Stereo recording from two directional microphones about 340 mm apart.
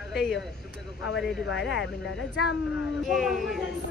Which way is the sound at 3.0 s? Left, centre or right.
Centre.